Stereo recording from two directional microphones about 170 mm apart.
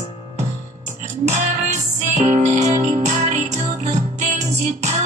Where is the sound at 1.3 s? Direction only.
40° right (ahead or behind).